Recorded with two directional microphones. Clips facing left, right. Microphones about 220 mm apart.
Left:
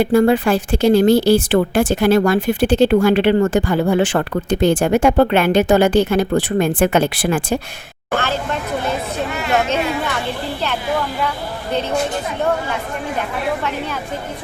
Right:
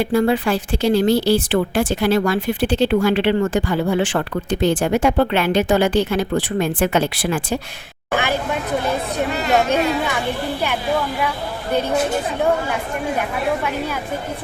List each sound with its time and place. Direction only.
0.0 s speech: 50° left (ahead or behind)
8.1 s speech: 15° right (ahead or behind)
13.6 s speech: 10° right (ahead or behind)